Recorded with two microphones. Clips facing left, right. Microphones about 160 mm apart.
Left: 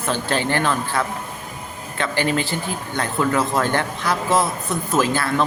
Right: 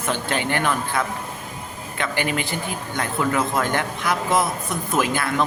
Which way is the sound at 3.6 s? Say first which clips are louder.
Left 2 dB; 20° right (ahead or behind).